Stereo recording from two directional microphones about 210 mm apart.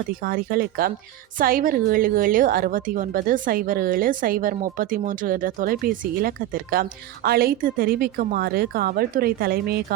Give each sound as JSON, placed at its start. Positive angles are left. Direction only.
{"t": 0.1, "sound": "a woman's voice", "side_deg": -45}